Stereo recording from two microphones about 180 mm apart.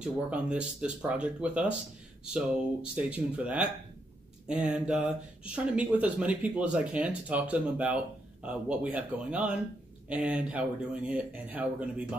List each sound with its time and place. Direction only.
0.0 s speech: 5° right (ahead or behind)
3.0 s speech: 5° right (ahead or behind)